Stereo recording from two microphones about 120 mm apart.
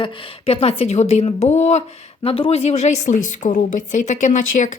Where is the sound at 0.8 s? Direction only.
65° left (ahead or behind).